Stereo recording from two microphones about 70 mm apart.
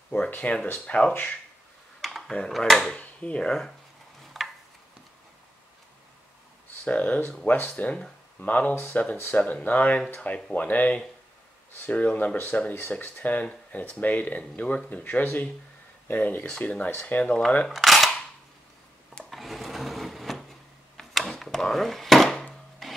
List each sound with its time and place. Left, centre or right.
0.3 s speech: left
2.0 s computer keyboard: centre
2.9 s speech: centre
4.2 s a sound: centre
6.8 s speech: centre
8.7 s speech: left
17.6 s cutlery: centre
19.3 s sewing machine: centre
22.5 s chopping: centre